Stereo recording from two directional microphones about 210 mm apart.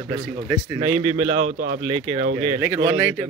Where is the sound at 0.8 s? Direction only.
25° right (ahead or behind).